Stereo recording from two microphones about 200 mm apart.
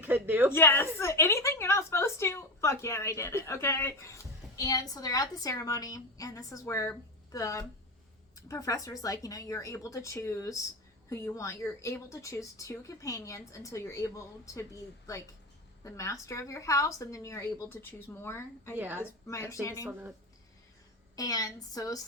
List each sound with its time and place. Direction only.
0.0 s a sound: 10° right (ahead or behind)
0.5 s a woman's voice: 10° left (ahead or behind)
15.8 s a woman's voice: 15° left (ahead or behind)
18.8 s a woman's voice: 10° right (ahead or behind)
19.3 s a woman's voice: 15° left (ahead or behind)
19.9 s a woman's voice: 10° right (ahead or behind)
21.2 s a woman's voice: 20° left (ahead or behind)